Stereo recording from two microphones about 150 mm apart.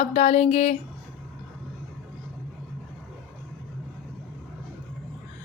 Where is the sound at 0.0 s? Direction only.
45° left (ahead or behind).